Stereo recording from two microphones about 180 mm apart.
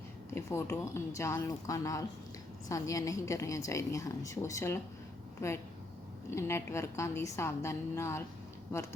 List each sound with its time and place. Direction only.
0.3 s a woman's voice: 15° left (ahead or behind)